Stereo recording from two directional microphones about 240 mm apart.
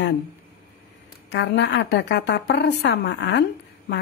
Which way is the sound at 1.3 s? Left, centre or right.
Left.